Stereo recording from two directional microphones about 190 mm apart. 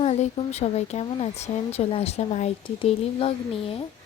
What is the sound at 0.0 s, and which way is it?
Speech, 35° left (ahead or behind).